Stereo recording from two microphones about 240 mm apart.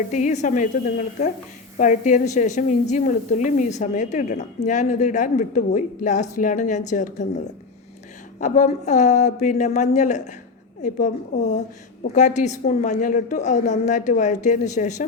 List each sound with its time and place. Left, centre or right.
0.1 s a woman's voice: left